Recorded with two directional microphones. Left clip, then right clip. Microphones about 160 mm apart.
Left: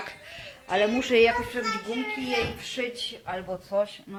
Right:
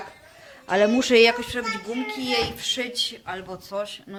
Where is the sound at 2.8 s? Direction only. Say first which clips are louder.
Right 4 dB; 20° right (ahead or behind).